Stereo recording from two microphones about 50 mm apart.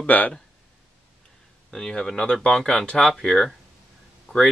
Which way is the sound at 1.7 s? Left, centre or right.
Centre.